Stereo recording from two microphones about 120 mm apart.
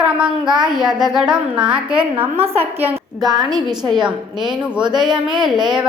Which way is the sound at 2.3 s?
55° right (ahead or behind).